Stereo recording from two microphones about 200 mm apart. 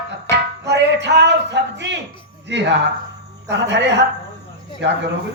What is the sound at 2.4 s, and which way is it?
A man's voice, 60° right (ahead or behind).